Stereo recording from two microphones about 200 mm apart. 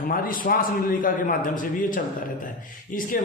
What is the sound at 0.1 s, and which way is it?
A man's voice, 45° left (ahead or behind).